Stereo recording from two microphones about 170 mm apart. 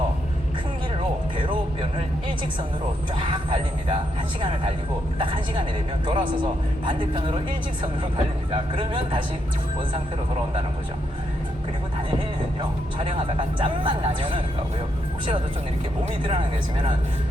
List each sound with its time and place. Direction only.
3.2 s speech: 30° right (ahead or behind)
8.7 s speech: 30° right (ahead or behind)
13.0 s speech: 30° right (ahead or behind)
16.2 s speech: 30° right (ahead or behind)